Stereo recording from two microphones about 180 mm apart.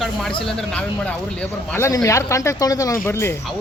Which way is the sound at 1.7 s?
15° left (ahead or behind).